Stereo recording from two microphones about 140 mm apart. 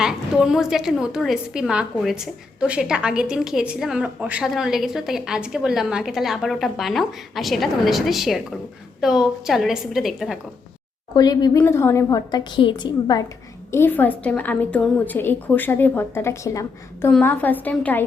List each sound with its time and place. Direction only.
0.0 s a woman's voice: 5° right (ahead or behind)
11.1 s a woman's voice: 30° left (ahead or behind)
11.6 s a woman's voice: 15° left (ahead or behind)
13.7 s a woman's voice: 15° left (ahead or behind)
17.1 s a woman's voice: 10° left (ahead or behind)